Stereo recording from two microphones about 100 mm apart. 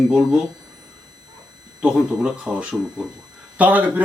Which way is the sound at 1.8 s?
10° right (ahead or behind).